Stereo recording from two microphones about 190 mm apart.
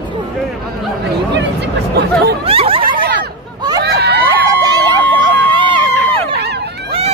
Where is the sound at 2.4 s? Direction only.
30° right (ahead or behind).